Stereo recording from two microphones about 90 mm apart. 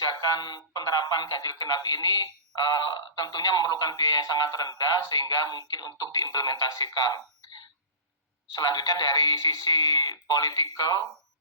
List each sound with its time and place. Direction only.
0.0 s speech: 50° left (ahead or behind)